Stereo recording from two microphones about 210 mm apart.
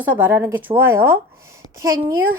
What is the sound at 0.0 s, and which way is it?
Speech, 10° right (ahead or behind).